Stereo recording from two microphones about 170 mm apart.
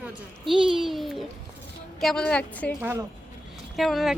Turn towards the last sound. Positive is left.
turn(degrees=0)  # may be behind; listen again after turning